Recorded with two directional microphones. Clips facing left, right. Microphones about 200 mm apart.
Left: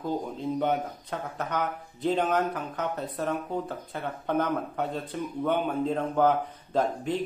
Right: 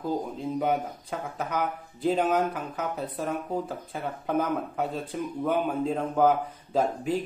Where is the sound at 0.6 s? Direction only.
5° right (ahead or behind).